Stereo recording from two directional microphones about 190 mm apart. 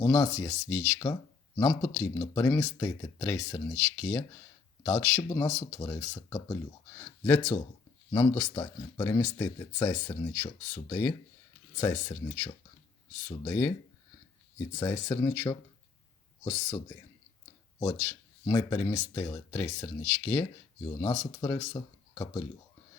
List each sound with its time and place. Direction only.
0.0 s speech: 15° left (ahead or behind)
13.2 s speech: 15° left (ahead or behind)
14.8 s speech: 20° left (ahead or behind)
17.7 s speech: 15° left (ahead or behind)